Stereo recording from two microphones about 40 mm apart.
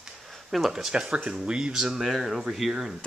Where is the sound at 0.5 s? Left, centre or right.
Centre.